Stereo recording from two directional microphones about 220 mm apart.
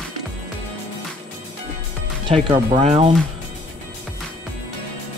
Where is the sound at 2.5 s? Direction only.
20° right (ahead or behind).